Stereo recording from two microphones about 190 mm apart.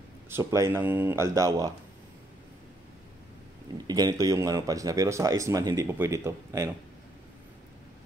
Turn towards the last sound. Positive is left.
turn(degrees=-15)  # may be behind; listen again after turning